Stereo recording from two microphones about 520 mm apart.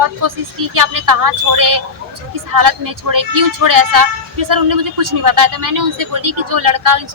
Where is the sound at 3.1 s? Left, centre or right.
Right.